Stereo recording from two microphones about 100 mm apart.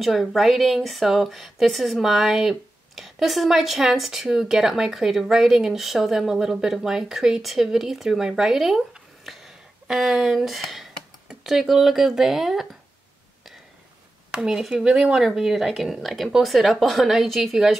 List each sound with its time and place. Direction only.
0.0 s speech: centre (ahead or behind)
14.3 s speech: 10° right (ahead or behind)